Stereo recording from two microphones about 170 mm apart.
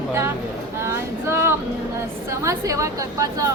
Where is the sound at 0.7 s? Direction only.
15° right (ahead or behind).